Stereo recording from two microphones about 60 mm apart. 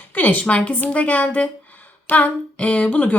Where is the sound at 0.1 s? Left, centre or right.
Left.